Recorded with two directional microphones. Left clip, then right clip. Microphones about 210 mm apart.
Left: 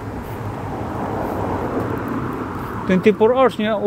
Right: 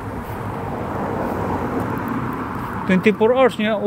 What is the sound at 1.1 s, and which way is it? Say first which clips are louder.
Vehicle: left 2 dB; 50° right (ahead or behind).